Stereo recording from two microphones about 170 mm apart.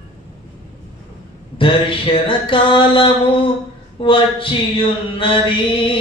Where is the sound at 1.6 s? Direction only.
30° left (ahead or behind).